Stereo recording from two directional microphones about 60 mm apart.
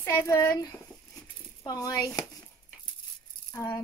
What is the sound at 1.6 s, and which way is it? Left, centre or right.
Speech, left.